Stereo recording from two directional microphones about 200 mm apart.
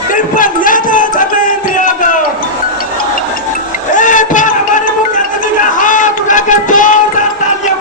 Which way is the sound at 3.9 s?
40° left (ahead or behind).